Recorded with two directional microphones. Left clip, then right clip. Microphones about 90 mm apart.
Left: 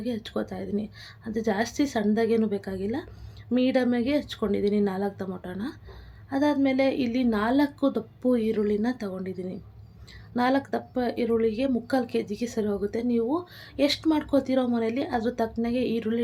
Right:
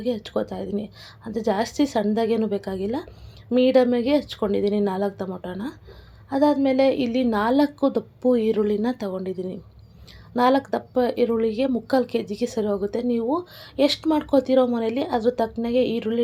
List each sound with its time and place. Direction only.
0.0 s a woman's voice: 30° right (ahead or behind)